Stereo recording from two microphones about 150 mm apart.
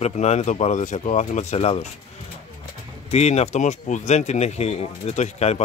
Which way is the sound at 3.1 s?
45° left (ahead or behind).